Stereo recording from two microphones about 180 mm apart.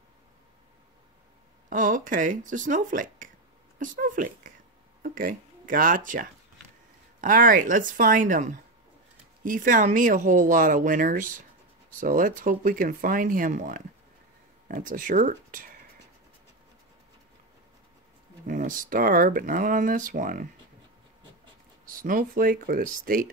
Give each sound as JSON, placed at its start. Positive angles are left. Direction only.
{"t": 1.7, "sound": "speech", "side_deg": -50}
{"t": 18.5, "sound": "speech", "side_deg": -50}
{"t": 22.0, "sound": "speech", "side_deg": -50}